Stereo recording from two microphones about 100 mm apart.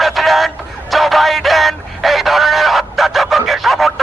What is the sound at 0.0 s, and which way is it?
Music, centre (ahead or behind).